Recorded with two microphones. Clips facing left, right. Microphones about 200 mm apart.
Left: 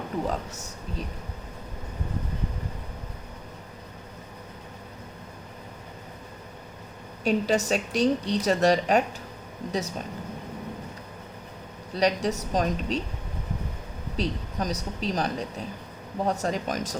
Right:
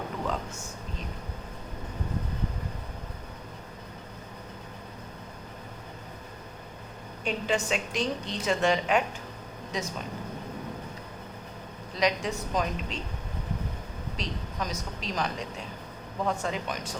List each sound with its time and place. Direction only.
7.3 s a woman's voice: 40° left (ahead or behind)
11.9 s a woman's voice: 40° left (ahead or behind)
14.2 s a woman's voice: 35° left (ahead or behind)